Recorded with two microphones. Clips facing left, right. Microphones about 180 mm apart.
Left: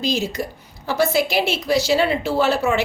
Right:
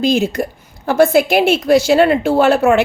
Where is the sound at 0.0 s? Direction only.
55° right (ahead or behind).